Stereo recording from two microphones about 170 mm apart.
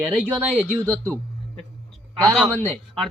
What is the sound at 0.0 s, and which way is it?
Speech, centre (ahead or behind).